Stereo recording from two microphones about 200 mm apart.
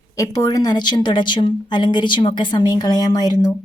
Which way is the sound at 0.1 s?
15° left (ahead or behind).